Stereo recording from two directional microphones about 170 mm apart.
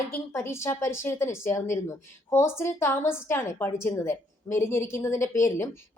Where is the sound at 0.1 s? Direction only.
15° left (ahead or behind).